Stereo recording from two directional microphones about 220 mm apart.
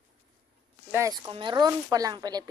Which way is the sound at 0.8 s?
15° right (ahead or behind).